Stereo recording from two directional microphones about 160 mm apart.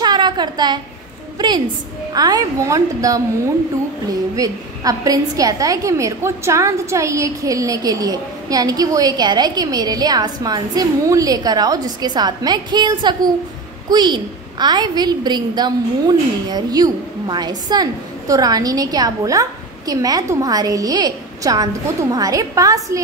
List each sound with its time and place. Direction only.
0.0 s a sound: 25° right (ahead or behind)
2.1 s a woman's voice: 25° right (ahead or behind)
4.4 s a woman's voice: 20° right (ahead or behind)